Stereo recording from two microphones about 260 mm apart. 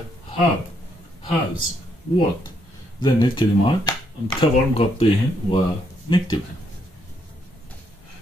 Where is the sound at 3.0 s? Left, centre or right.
Centre.